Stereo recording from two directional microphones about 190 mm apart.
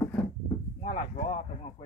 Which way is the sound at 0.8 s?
35° left (ahead or behind).